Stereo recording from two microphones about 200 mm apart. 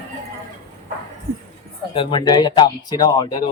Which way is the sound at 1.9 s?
25° left (ahead or behind).